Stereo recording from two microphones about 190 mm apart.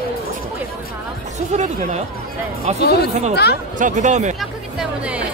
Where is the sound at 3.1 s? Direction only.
35° right (ahead or behind).